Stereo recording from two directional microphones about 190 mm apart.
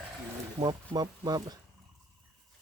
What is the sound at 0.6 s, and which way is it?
Speech, 20° right (ahead or behind).